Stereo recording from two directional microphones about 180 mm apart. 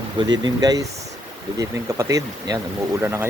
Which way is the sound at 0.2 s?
25° right (ahead or behind).